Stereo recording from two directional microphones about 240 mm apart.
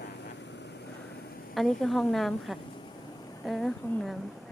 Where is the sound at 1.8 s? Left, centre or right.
Centre.